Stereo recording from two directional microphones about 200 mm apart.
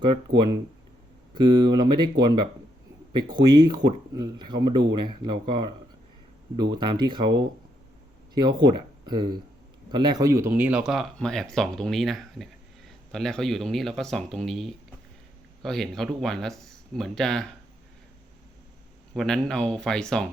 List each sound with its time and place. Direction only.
1.3 s speech: 20° right (ahead or behind); by 17.5 s centre (ahead or behind)
19.1 s speech: 5° left (ahead or behind)